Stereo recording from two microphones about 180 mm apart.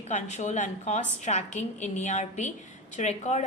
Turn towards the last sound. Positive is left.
turn(degrees=40)  # may be behind; listen again after turning